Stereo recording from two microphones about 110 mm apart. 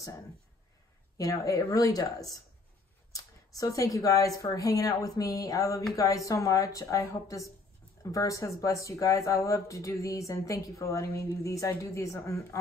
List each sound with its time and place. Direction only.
1.1 s a woman's voice: 30° left (ahead or behind)